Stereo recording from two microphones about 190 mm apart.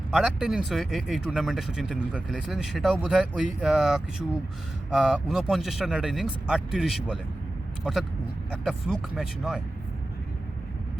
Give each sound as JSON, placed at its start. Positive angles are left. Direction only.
{"t": 0.1, "sound": "speech", "side_deg": -5}